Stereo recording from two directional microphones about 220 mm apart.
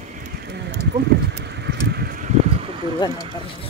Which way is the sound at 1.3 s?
50° right (ahead or behind).